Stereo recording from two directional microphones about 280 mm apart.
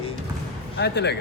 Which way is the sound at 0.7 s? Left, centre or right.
Left.